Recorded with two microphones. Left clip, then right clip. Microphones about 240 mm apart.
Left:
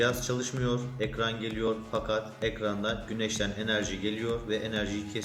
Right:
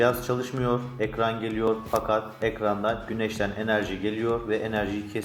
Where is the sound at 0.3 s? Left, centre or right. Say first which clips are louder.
Right 5 dB; centre.